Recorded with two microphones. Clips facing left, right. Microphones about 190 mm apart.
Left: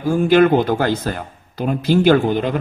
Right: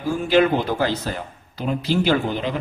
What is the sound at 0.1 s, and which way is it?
A man's voice, 50° left (ahead or behind).